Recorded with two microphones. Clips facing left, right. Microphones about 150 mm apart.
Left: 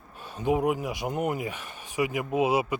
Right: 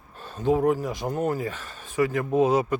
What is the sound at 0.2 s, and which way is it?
A man's voice, 10° left (ahead or behind).